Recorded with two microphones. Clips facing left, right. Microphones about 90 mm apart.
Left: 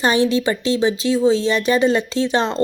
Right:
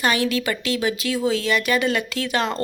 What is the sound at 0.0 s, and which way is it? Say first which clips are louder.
A woman's voice: left 5 dB; 30° left (ahead or behind).